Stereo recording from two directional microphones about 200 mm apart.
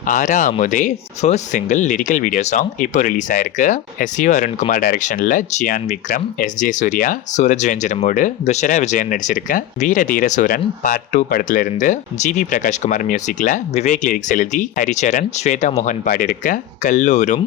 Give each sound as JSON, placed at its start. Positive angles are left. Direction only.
{"t": 0.1, "sound": "speech", "side_deg": 40}